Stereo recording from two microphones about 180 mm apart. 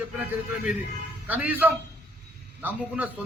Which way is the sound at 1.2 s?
10° right (ahead or behind).